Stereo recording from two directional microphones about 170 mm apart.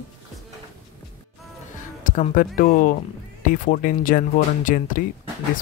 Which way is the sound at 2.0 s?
50° left (ahead or behind).